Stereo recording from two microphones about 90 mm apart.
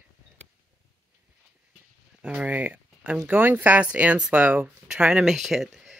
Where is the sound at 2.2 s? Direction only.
15° right (ahead or behind).